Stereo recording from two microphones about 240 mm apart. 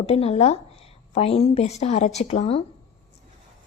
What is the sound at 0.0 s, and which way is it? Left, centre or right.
A woman's voice, left.